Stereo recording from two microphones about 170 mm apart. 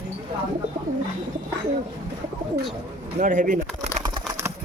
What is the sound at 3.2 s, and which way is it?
Bird, 50° right (ahead or behind).